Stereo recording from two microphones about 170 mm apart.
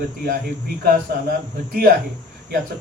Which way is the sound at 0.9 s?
55° right (ahead or behind).